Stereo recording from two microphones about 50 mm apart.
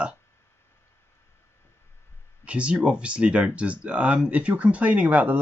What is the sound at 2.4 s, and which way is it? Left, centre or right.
Speech, right.